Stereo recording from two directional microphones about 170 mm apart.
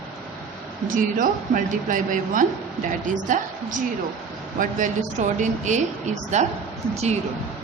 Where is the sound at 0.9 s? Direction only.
50° right (ahead or behind).